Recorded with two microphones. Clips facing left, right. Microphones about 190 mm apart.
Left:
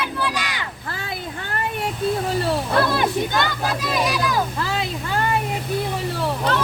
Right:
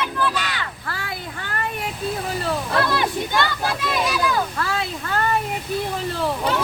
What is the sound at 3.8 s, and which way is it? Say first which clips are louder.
Speech: left 2 dB; 15° left (ahead or behind).